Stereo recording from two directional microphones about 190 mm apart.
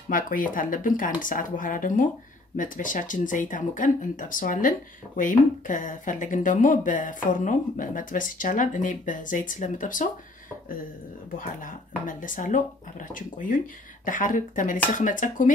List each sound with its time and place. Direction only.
0.1 s speech: 45° left (ahead or behind)
11.3 s speech: 45° left (ahead or behind)